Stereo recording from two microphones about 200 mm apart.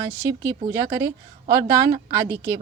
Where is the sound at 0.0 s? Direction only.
15° right (ahead or behind).